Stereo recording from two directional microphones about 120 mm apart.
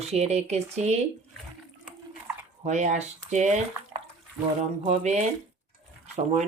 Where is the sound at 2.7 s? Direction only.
80° right.